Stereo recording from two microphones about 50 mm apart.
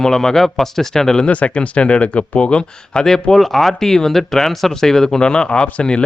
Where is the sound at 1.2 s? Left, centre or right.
Left.